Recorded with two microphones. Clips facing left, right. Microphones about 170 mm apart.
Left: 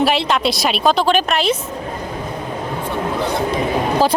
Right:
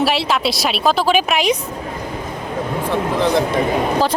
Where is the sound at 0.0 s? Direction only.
Centre (ahead or behind).